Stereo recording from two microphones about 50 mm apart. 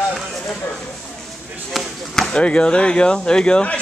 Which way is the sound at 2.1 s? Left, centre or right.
Centre.